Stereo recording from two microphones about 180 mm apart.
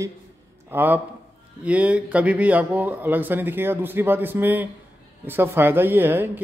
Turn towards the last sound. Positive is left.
turn(degrees=-10)  # may be behind; listen again after turning